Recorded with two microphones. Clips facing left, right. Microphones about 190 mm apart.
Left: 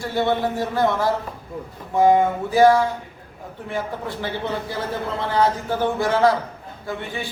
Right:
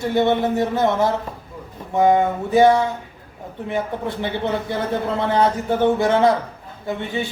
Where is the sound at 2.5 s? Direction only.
25° right (ahead or behind).